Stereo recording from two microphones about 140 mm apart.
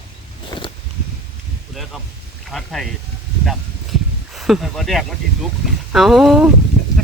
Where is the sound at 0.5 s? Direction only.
30° left (ahead or behind).